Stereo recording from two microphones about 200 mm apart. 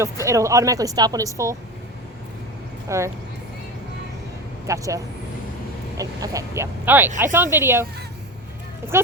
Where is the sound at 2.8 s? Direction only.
15° right (ahead or behind).